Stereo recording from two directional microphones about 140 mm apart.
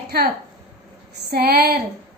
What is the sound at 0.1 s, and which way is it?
Speech, 90° right.